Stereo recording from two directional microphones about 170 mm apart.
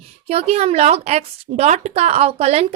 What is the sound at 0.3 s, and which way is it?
A woman's voice, 40° right (ahead or behind).